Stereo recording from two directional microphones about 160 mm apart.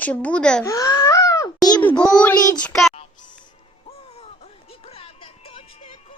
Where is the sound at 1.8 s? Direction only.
10° left (ahead or behind).